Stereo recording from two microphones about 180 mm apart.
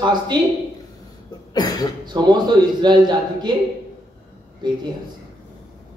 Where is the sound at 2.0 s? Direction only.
25° right (ahead or behind).